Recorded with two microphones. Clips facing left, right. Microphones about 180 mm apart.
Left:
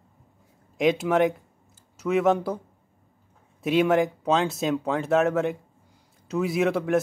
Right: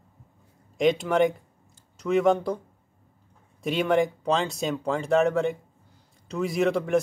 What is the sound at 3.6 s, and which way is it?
Speech, 5° left (ahead or behind).